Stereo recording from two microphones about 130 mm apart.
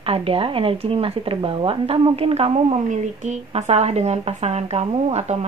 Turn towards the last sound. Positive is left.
turn(degrees=-55)  # may be behind; listen again after turning